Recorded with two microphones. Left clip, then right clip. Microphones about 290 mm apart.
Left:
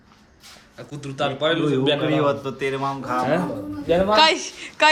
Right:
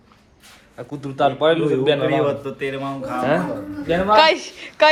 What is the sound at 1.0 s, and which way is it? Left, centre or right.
A man's voice, centre.